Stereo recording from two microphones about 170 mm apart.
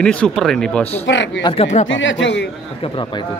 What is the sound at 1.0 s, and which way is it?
Speech, 90° left.